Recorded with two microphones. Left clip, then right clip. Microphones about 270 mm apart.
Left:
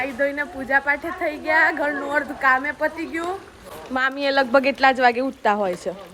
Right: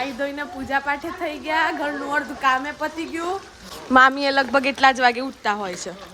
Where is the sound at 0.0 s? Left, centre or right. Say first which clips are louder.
Left 3 dB; centre.